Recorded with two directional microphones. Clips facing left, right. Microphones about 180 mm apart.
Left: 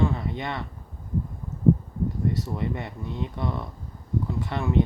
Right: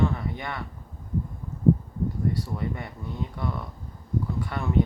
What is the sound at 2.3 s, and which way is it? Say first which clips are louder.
Speech: left 2 dB; 20° left (ahead or behind).